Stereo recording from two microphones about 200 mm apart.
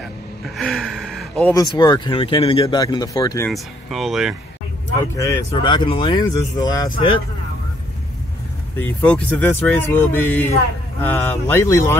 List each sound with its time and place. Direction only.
0.6 s gasp: centre (ahead or behind)
1.5 s speech: 20° left (ahead or behind)
3.4 s speech: centre (ahead or behind)
5.1 s speech: 15° left (ahead or behind)
8.7 s speech: 10° left (ahead or behind)